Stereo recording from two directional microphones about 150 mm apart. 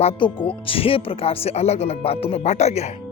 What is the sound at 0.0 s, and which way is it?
Speech, 40° left (ahead or behind).